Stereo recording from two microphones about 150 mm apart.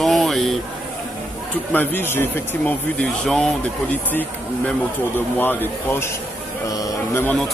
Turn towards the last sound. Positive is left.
turn(degrees=15)  # may be behind; listen again after turning